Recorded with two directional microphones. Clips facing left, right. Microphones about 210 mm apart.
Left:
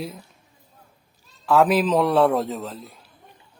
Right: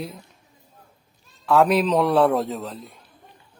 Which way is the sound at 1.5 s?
Centre (ahead or behind).